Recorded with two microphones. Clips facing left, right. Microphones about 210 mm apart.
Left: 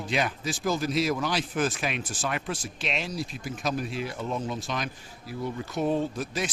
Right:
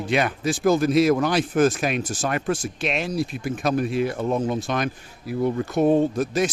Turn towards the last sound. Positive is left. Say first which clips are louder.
# right 9 dB
turn(degrees=-45)  # may be behind; listen again after turning